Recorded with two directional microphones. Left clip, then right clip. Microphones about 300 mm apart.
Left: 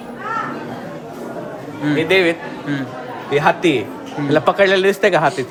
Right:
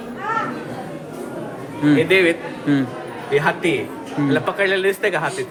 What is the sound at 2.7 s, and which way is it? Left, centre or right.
Speech, centre.